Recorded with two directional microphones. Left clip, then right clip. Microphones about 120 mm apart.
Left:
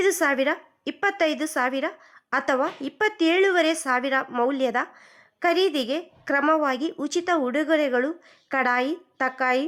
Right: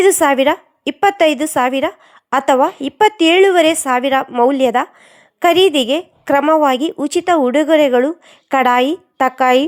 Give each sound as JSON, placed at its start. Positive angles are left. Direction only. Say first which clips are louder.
{"t": 0.0, "sound": "a woman's voice", "louder": "right 10 dB", "side_deg": -45}